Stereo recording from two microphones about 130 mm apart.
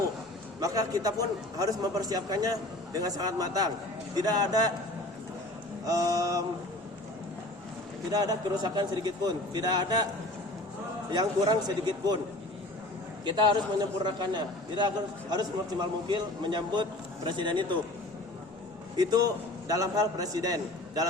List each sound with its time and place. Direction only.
0.6 s a man's voice: 25° right (ahead or behind)
5.8 s a man's voice: 25° right (ahead or behind)
8.1 s a man's voice: 30° right (ahead or behind)
11.1 s a man's voice: 30° right (ahead or behind)
13.2 s a man's voice: 35° right (ahead or behind)
19.6 s a man's voice: 25° right (ahead or behind)